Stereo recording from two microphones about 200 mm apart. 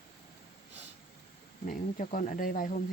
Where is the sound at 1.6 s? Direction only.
40° left (ahead or behind).